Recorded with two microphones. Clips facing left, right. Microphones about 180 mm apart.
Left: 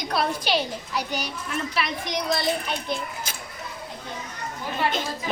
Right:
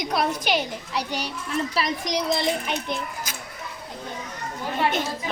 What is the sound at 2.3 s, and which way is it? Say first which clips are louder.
Speech: left 1 dB; 20° right (ahead or behind).